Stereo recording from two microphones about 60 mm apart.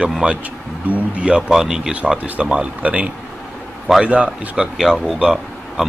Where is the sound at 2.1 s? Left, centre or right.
Right.